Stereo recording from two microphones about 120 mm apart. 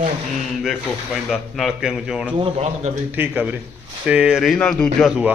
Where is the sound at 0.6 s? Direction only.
Centre (ahead or behind).